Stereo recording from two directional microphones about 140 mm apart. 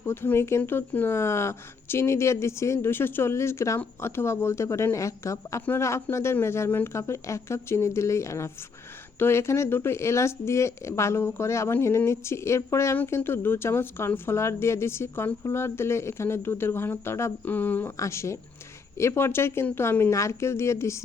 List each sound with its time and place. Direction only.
0.0 s speech: 15° left (ahead or behind)